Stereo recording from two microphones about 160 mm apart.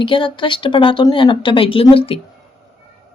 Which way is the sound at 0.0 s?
30° left (ahead or behind).